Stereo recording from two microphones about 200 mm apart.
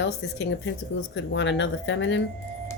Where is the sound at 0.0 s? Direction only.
65° left (ahead or behind).